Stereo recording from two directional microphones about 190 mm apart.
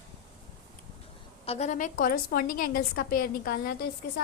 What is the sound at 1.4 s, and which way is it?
A woman's voice, 35° left (ahead or behind).